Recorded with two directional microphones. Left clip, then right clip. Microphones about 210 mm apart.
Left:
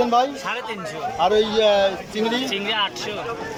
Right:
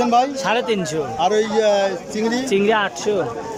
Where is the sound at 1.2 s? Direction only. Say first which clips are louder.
Even; 5° right (ahead or behind).